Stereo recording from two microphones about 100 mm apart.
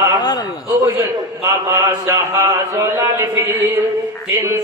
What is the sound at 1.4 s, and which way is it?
Music, 30° right (ahead or behind).